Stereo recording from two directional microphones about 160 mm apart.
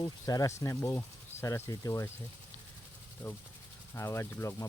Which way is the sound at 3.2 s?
15° left (ahead or behind).